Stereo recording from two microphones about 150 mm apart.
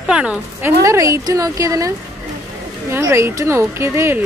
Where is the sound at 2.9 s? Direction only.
20° right (ahead or behind).